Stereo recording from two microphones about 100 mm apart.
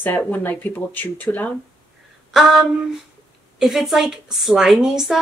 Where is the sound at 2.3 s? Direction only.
5° right (ahead or behind).